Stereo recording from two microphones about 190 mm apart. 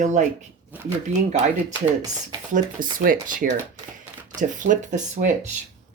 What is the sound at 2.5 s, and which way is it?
Speech, 45° right (ahead or behind).